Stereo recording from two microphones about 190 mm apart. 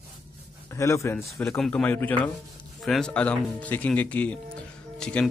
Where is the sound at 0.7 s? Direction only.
15° left (ahead or behind).